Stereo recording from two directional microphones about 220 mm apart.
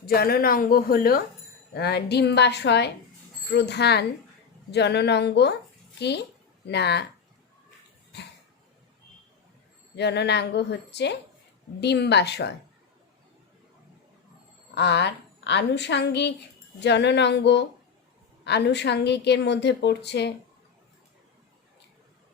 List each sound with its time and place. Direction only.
0.0 s a woman's voice: 45° left (ahead or behind)
9.9 s a woman's voice: 50° left (ahead or behind)
14.8 s a woman's voice: 50° left (ahead or behind)